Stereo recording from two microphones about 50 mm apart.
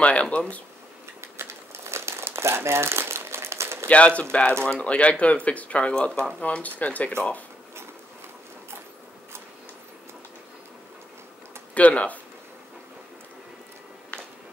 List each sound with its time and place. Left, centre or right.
0.0 s speech: left
1.3 s crumpling: right
4.2 s speech: left
11.7 s speech: left